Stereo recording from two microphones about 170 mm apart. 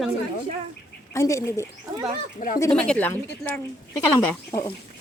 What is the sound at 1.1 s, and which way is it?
Speech, 20° left (ahead or behind).